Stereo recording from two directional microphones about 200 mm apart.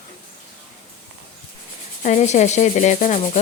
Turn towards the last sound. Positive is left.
turn(degrees=35)  # may be behind; listen again after turning